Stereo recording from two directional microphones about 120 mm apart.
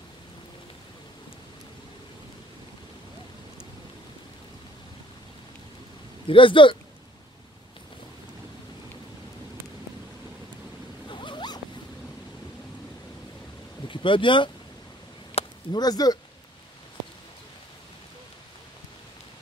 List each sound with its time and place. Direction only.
6.2 s speech: 45° left (ahead or behind)
11.1 s zipper: 40° left (ahead or behind)
13.8 s speech: 45° left (ahead or behind)
15.4 s a sound: 55° left (ahead or behind)
15.7 s speech: 35° left (ahead or behind)